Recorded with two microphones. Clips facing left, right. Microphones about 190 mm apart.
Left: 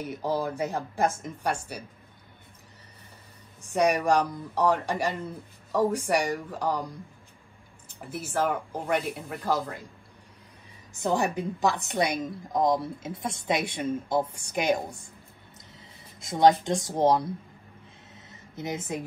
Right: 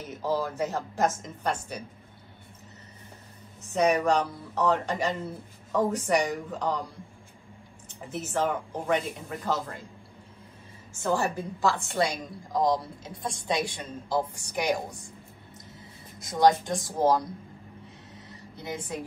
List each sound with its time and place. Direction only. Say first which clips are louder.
0.0 s speech: left 1 dB; 10° left (ahead or behind)
3.6 s speech: even; 10° left (ahead or behind)
8.1 s speech: even; 10° left (ahead or behind)
11.0 s a woman's voice: left 1 dB; 15° left (ahead or behind)
16.2 s a woman's voice: left 1 dB; 25° left (ahead or behind)
18.1 s a sound: left 5 dB; 20° left (ahead or behind)